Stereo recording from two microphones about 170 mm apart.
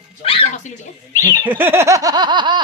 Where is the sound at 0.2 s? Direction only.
35° left (ahead or behind).